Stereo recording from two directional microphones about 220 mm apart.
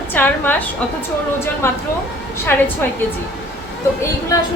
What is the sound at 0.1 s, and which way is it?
Speech, 10° left (ahead or behind).